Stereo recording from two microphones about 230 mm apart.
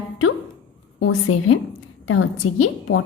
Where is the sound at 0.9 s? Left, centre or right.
Left.